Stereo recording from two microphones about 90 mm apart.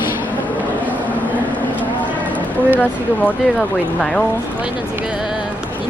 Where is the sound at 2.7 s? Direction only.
20° left (ahead or behind).